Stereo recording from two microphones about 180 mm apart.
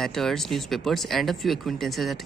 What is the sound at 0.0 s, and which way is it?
Speech, centre (ahead or behind).